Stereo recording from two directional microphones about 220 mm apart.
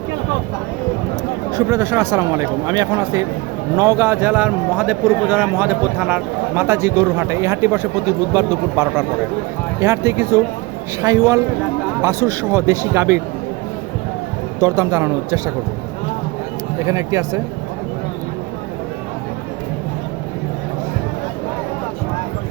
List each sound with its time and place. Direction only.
1.5 s a man's voice: 15° right (ahead or behind)
14.6 s a man's voice: 15° right (ahead or behind)
16.8 s a man's voice: 15° right (ahead or behind)